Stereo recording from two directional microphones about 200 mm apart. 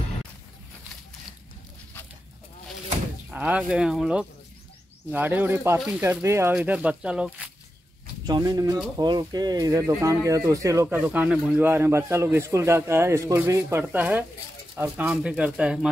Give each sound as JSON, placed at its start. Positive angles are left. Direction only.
{"t": 3.3, "sound": "speech", "side_deg": -5}
{"t": 8.3, "sound": "speech", "side_deg": -20}